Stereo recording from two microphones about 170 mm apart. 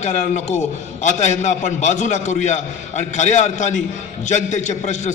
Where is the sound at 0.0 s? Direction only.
40° left (ahead or behind).